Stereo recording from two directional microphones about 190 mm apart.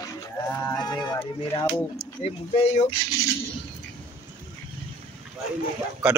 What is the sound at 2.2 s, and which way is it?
Speech, 30° left (ahead or behind).